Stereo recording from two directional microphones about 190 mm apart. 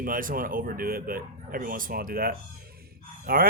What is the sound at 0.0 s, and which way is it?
Speech, 45° right (ahead or behind).